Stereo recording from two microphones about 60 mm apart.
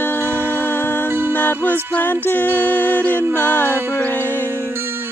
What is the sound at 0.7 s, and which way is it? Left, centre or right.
Music, left.